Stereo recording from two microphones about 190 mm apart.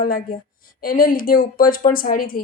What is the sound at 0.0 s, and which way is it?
A woman's voice, 50° left (ahead or behind).